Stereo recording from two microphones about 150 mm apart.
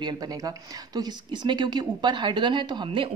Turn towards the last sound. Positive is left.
turn(degrees=-30)  # may be behind; listen again after turning